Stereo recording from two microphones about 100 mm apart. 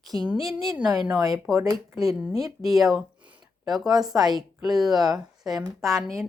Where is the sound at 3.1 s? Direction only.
15° right (ahead or behind).